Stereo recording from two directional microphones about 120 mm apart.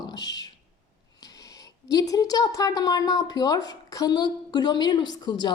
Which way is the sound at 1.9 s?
30° left (ahead or behind).